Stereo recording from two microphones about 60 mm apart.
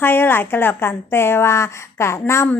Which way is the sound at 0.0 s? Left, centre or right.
Left.